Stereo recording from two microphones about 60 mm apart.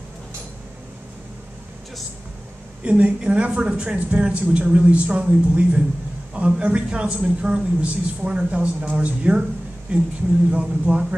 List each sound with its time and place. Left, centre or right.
2.8 s a man's voice: right